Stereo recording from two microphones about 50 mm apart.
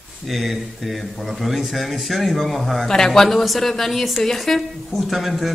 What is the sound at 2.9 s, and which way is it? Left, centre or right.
Mantra, centre.